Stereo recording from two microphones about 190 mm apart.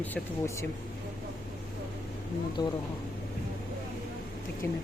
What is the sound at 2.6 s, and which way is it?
Speech, 20° left (ahead or behind).